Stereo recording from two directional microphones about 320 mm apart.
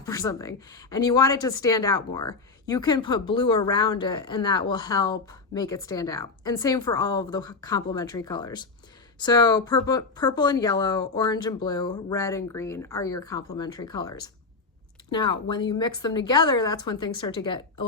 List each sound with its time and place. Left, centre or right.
0.0 s a woman's voice: centre